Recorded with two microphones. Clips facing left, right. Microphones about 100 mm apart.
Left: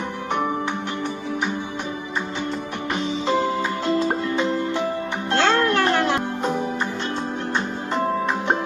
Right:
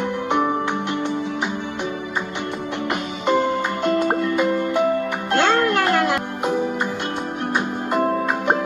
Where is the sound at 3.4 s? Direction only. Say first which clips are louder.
Right 2 dB; 55° right (ahead or behind).